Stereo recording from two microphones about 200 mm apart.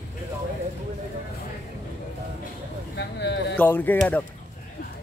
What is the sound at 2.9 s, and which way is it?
Speech, 60° left (ahead or behind).